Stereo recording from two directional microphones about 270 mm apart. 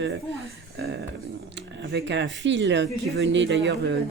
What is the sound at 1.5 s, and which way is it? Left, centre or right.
Speech, right.